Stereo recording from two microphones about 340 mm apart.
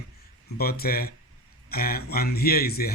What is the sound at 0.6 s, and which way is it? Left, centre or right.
Speech, left.